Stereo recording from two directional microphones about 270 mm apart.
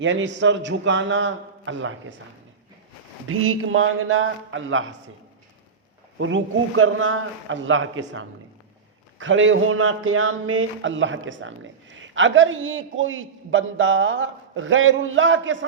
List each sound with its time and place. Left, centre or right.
0.0 s speech: right
3.2 s speech: right
6.1 s speech: right